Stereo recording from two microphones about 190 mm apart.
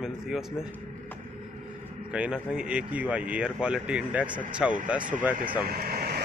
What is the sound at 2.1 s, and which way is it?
Speech, 5° right (ahead or behind).